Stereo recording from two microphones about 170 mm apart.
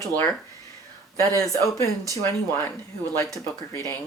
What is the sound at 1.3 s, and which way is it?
Speech, 20° left (ahead or behind).